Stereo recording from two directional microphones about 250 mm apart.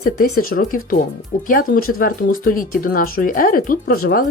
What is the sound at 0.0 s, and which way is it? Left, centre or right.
Speech, left.